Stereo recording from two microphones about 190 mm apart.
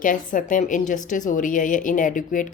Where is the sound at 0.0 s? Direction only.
45° left (ahead or behind).